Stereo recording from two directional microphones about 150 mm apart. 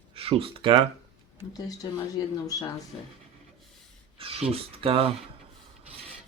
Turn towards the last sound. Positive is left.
turn(degrees=-40)  # may be behind; listen again after turning